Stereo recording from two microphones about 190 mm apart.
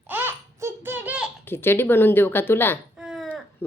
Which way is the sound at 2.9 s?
5° right (ahead or behind).